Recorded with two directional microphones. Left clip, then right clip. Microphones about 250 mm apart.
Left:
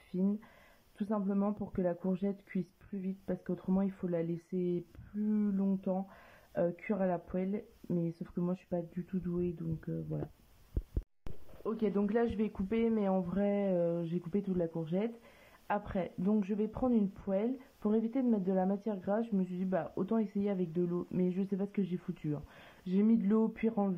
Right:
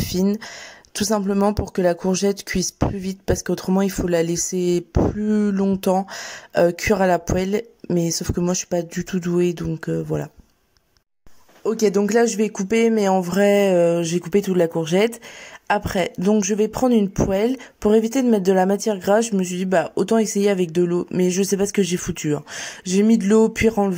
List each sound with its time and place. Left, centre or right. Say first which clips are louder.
0.1 s speech: right 12 dB; right
11.6 s speech: right 16 dB; right